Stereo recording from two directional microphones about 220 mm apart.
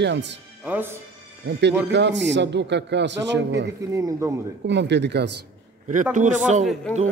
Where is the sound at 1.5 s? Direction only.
50° right (ahead or behind).